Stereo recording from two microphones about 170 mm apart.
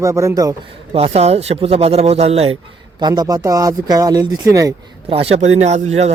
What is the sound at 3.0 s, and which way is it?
A man's voice, 25° right (ahead or behind).